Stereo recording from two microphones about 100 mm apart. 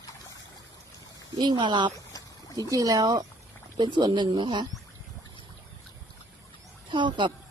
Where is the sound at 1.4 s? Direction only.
50° right (ahead or behind).